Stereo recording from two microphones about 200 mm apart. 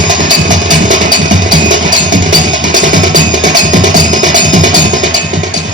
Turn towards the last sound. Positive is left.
turn(degrees=-40)  # may be behind; listen again after turning